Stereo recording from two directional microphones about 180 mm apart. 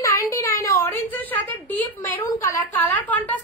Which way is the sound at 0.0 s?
15° left (ahead or behind).